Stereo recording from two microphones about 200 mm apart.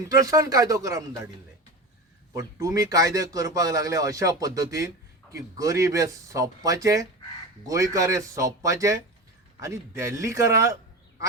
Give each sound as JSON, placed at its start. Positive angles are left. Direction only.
{"t": 0.1, "sound": "speech", "side_deg": -15}
{"t": 2.3, "sound": "speech", "side_deg": -15}